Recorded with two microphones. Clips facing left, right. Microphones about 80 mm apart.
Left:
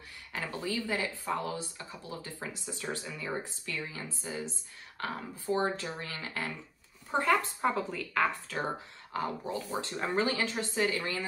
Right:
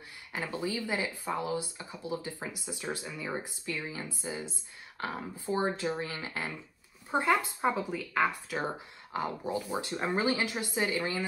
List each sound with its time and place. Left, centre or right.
0.3 s speech: centre